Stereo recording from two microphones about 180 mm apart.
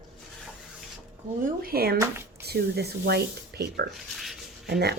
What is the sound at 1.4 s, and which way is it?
Speech, 55° right (ahead or behind).